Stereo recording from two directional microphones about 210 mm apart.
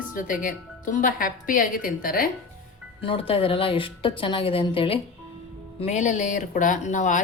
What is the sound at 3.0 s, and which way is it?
A woman's voice, 25° left (ahead or behind).